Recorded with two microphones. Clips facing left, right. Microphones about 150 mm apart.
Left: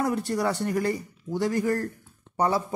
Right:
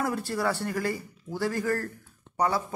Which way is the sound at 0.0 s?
20° left (ahead or behind).